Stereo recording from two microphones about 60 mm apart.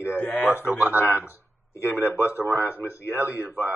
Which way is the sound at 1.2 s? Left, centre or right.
Left.